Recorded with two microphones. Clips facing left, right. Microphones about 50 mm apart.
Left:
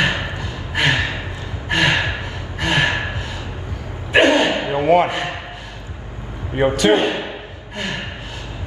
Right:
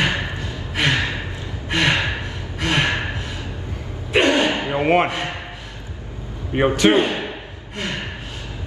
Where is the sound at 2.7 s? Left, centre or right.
Left.